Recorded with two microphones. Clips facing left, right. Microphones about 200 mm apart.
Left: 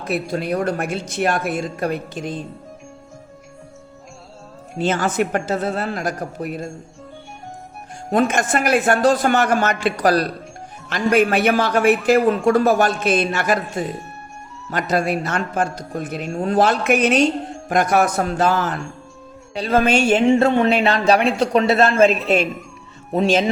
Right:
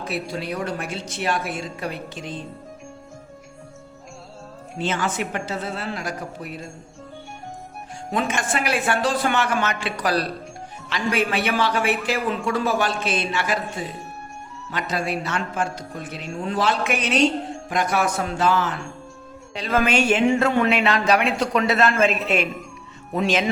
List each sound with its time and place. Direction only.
0.1 s a woman's voice: 50° left (ahead or behind)
4.8 s a woman's voice: 40° left (ahead or behind)
8.3 s a woman's voice: 45° left (ahead or behind)
19.5 s speech: 35° left (ahead or behind)